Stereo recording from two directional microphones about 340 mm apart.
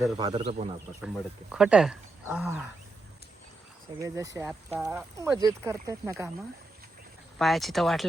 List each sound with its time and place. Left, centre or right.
0.2 s speech: centre
1.0 s speech: centre
4.0 s speech: centre
7.3 s speech: centre